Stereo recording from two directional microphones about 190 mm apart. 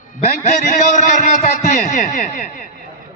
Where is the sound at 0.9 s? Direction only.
45° left (ahead or behind).